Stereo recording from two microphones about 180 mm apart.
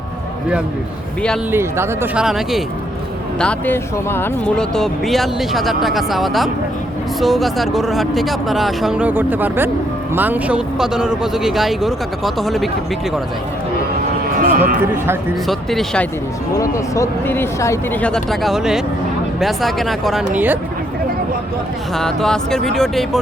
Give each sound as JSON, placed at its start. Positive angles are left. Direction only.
{"t": 1.5, "sound": "speech", "side_deg": -15}
{"t": 2.2, "sound": "speech", "side_deg": 0}
{"t": 14.3, "sound": "speech", "side_deg": -55}
{"t": 15.4, "sound": "speech", "side_deg": 0}
{"t": 16.6, "sound": "speech", "side_deg": 15}
{"t": 18.1, "sound": "speech", "side_deg": 0}
{"t": 21.9, "sound": "speech", "side_deg": 0}